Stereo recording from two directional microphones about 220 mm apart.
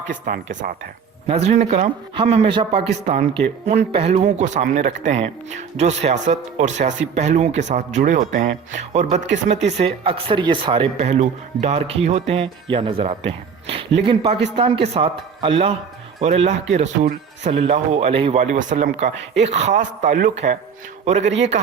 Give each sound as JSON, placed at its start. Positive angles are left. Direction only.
{"t": 0.1, "sound": "speech", "side_deg": -35}